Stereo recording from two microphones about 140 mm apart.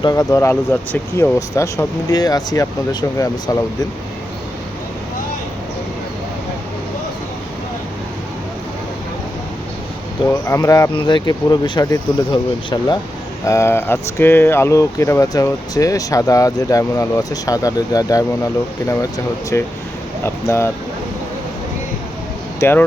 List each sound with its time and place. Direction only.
0.0 s speech: 25° left (ahead or behind)
10.4 s speech: 20° left (ahead or behind)
13.4 s speech: 20° left (ahead or behind)
22.6 s speech: 15° left (ahead or behind)